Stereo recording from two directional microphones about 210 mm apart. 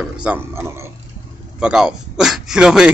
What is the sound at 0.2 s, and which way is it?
Speech, 10° right (ahead or behind).